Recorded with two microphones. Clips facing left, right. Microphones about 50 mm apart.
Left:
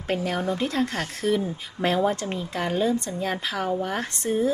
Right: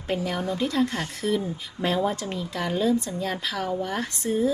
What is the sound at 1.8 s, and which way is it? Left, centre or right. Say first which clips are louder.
A woman's voice: left 2 dB; left.